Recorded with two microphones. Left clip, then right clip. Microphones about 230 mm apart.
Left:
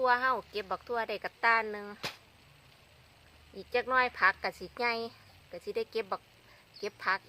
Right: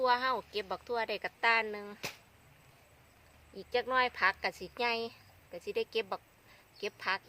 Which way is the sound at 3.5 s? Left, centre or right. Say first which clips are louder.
Left 2 dB; centre.